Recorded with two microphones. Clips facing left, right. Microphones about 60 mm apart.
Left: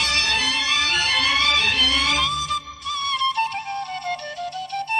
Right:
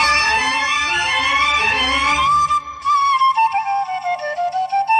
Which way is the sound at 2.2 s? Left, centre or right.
Right.